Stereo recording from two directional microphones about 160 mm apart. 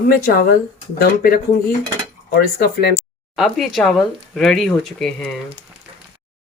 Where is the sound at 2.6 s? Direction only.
90° left.